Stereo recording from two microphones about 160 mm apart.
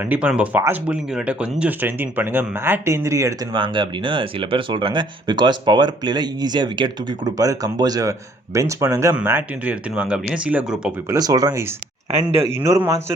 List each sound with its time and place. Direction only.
0.0 s speech: 10° right (ahead or behind)
3.6 s speech: 30° right (ahead or behind); by 10.9 s 5° right (ahead or behind)
11.1 s speech: 20° right (ahead or behind)